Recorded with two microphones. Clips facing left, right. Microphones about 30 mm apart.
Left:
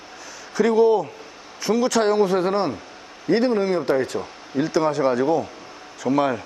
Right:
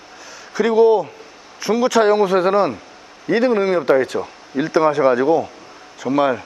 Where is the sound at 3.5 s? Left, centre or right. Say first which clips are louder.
Right 4 dB; right.